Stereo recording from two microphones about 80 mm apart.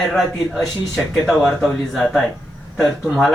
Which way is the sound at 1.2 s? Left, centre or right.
Centre.